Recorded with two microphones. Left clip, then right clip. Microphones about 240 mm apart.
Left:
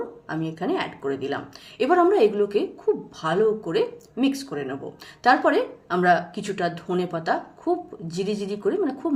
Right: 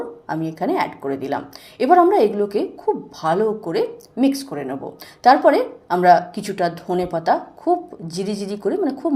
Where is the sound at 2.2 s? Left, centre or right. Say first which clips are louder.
Right 2 dB; centre.